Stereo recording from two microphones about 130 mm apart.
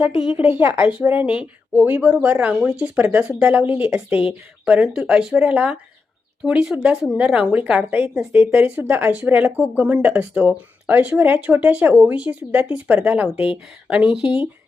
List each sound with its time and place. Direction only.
0.0 s a woman's voice: 45° left (ahead or behind)
0.3 s speech: 15° right (ahead or behind)